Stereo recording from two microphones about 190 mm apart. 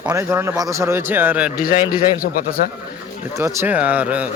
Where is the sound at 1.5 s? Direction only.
45° left (ahead or behind).